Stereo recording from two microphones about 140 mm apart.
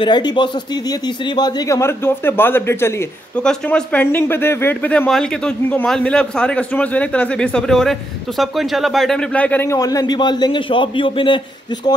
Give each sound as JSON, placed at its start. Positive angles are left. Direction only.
{"t": 0.0, "sound": "speech", "side_deg": 30}
{"t": 3.3, "sound": "speech", "side_deg": 5}